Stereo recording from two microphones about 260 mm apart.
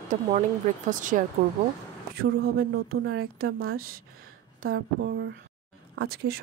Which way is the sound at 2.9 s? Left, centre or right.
Right.